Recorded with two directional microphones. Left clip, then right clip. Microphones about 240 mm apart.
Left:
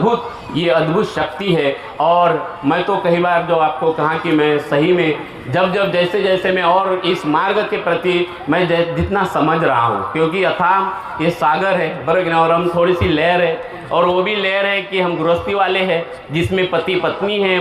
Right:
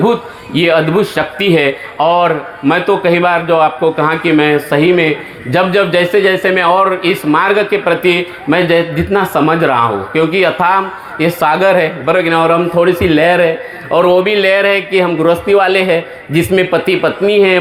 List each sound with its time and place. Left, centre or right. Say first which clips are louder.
0.5 s speech: right 4 dB; right